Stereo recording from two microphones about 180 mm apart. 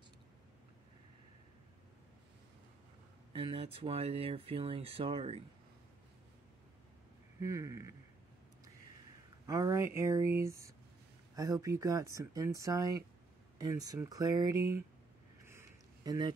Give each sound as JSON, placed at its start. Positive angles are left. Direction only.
{"t": 3.3, "sound": "speech", "side_deg": -30}
{"t": 7.3, "sound": "speech", "side_deg": -15}
{"t": 9.5, "sound": "speech", "side_deg": -20}
{"t": 15.4, "sound": "a sound", "side_deg": -15}